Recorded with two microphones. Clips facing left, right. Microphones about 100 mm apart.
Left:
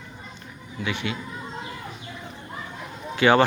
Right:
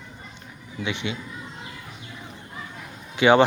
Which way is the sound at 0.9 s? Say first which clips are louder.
Even; 20° right (ahead or behind).